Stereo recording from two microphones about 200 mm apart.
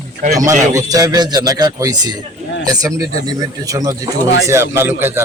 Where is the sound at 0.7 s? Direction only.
15° right (ahead or behind).